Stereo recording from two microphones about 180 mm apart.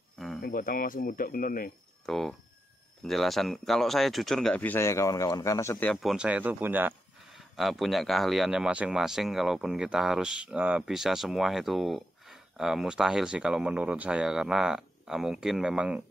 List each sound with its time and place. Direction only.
0.4 s speech: 50° left (ahead or behind)
2.0 s speech: centre (ahead or behind)